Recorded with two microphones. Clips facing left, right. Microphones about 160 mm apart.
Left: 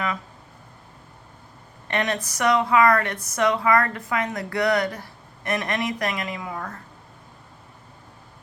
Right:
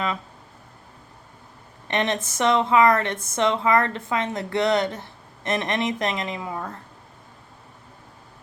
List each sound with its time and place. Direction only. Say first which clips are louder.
1.9 s a woman's voice: right 1 dB; 20° right (ahead or behind)